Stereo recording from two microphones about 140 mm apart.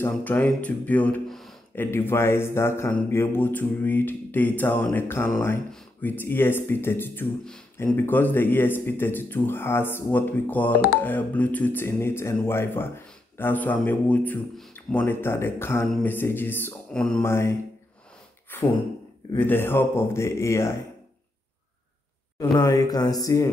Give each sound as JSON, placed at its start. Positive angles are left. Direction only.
{"t": 0.0, "sound": "speech", "side_deg": 10}
{"t": 17.2, "sound": "speech", "side_deg": 20}
{"t": 18.5, "sound": "gasp", "side_deg": 15}
{"t": 19.3, "sound": "speech", "side_deg": 15}
{"t": 22.4, "sound": "speech", "side_deg": 25}